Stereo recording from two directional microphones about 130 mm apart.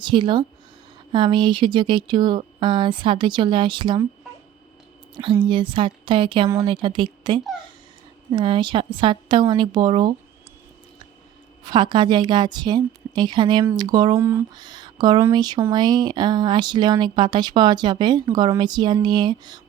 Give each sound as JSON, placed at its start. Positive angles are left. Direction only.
{"t": 0.0, "sound": "speech", "side_deg": -35}
{"t": 5.1, "sound": "speech", "side_deg": -40}
{"t": 11.7, "sound": "speech", "side_deg": -35}